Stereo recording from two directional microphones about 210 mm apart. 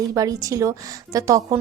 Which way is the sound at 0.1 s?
15° right (ahead or behind).